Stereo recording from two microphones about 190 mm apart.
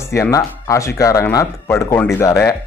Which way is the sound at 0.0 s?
15° left (ahead or behind).